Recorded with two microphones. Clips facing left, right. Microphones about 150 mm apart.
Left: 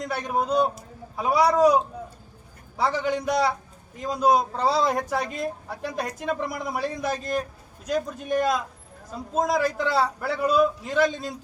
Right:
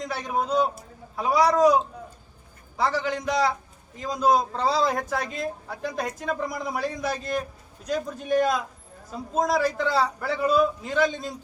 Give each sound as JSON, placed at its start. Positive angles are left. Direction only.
{"t": 0.0, "sound": "a woman's voice", "side_deg": 0}
{"t": 2.7, "sound": "a woman's voice", "side_deg": 5}